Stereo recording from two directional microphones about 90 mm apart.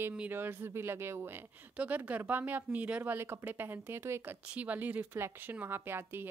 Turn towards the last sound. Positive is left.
turn(degrees=-25)  # may be behind; listen again after turning